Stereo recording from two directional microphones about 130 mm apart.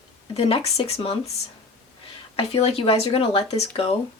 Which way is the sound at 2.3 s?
50° left (ahead or behind).